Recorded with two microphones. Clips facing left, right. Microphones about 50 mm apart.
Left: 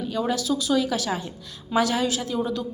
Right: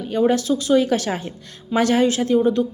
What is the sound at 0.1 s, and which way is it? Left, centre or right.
A woman's voice, right.